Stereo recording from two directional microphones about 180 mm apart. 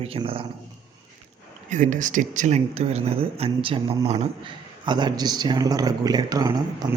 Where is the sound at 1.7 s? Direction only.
45° right (ahead or behind).